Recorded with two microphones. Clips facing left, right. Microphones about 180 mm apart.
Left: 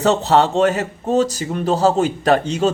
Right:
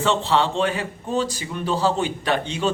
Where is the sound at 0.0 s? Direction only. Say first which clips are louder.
Left 5 dB; 40° left (ahead or behind).